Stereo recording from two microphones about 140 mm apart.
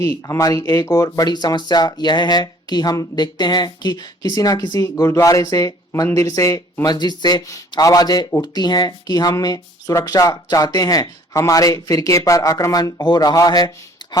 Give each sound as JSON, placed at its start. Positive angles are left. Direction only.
{"t": 0.0, "sound": "speech", "side_deg": 20}